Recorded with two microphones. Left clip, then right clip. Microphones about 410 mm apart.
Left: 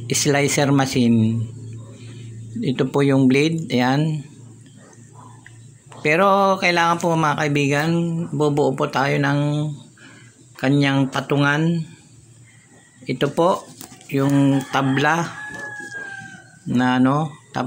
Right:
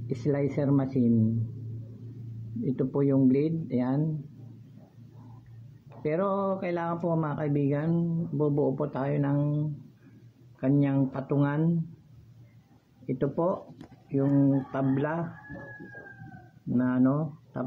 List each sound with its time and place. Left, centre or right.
0.2 s speech: right
2.7 s speech: right
6.0 s speech: right
13.0 s speech: right
16.7 s speech: right